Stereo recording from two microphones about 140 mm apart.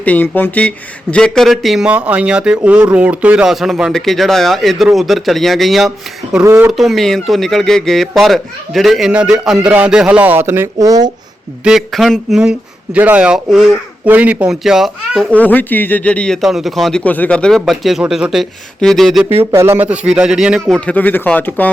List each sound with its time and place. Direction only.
0.0 s a man's voice: 10° left (ahead or behind)
6.4 s speech: 20° right (ahead or behind)
6.7 s speech: centre (ahead or behind); by 11.1 s 25° right (ahead or behind)
11.6 s speech: centre (ahead or behind)
15.3 s speech: 10° left (ahead or behind)
19.5 s speech: 20° right (ahead or behind)
20.8 s speech: 10° left (ahead or behind)